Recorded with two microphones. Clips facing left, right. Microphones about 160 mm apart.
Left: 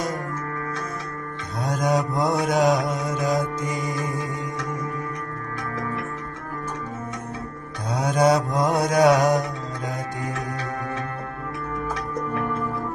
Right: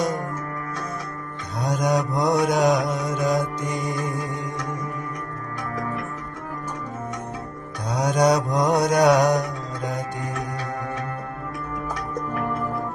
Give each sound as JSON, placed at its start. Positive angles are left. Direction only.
{"t": 1.7, "sound": "mantra", "side_deg": 0}
{"t": 7.9, "sound": "mantra", "side_deg": 0}